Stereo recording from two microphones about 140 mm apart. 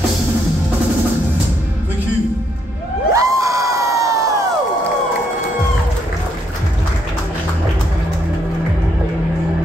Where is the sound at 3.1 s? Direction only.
25° right (ahead or behind).